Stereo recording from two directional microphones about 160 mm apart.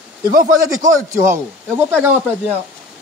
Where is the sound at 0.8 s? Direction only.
20° right (ahead or behind).